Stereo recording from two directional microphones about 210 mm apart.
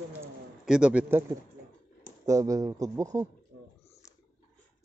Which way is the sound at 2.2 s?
15° right (ahead or behind).